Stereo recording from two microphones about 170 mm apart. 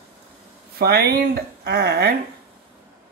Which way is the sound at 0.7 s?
70° right (ahead or behind).